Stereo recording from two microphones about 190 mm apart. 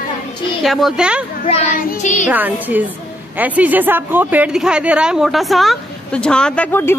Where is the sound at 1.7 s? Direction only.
45° left (ahead or behind).